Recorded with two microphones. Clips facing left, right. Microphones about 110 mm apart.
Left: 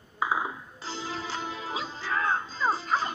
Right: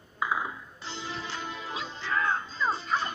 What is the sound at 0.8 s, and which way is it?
Music, 35° left (ahead or behind).